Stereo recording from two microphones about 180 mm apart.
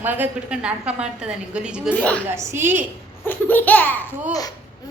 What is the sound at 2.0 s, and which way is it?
Laughter, 5° left (ahead or behind).